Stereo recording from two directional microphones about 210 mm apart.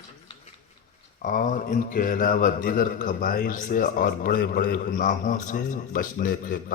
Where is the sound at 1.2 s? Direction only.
40° left (ahead or behind).